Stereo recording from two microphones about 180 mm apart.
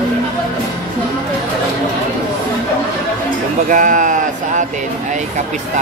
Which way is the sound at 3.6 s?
45° right (ahead or behind).